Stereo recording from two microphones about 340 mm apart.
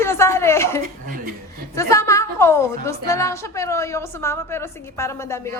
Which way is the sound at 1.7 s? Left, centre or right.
Centre.